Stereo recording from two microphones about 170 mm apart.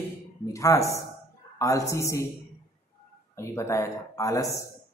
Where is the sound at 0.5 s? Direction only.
20° left (ahead or behind).